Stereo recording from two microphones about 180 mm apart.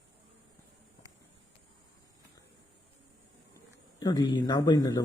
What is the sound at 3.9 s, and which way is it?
A man's voice, 25° left (ahead or behind).